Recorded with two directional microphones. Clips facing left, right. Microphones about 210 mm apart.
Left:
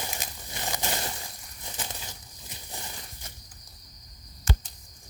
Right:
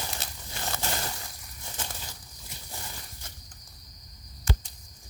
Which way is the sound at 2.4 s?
20° left (ahead or behind).